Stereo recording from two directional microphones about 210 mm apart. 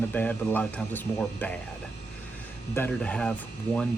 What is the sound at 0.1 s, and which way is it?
Speech, 5° left (ahead or behind).